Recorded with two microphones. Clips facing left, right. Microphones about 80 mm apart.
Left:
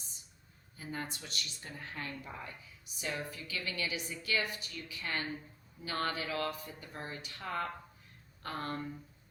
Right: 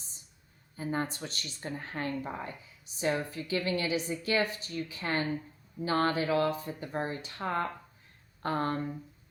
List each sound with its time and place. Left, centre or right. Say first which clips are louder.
0.8 s speech: right 8 dB; right